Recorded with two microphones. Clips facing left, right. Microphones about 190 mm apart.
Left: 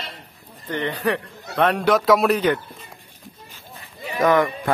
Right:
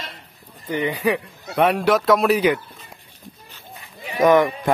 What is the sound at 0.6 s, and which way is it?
A man's voice, 10° right (ahead or behind).